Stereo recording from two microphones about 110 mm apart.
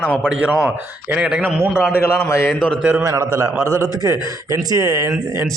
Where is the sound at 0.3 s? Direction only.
10° right (ahead or behind).